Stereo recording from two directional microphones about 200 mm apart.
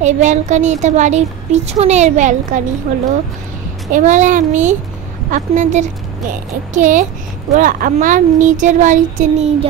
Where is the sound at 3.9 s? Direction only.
40° right (ahead or behind).